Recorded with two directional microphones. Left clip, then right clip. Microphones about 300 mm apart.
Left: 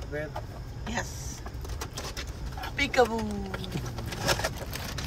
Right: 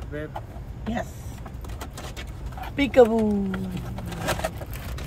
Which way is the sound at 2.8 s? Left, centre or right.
Centre.